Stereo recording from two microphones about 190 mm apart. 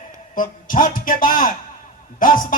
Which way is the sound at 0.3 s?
45° left (ahead or behind).